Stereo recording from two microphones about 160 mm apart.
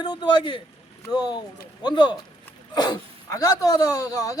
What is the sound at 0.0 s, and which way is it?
Speech, 25° left (ahead or behind).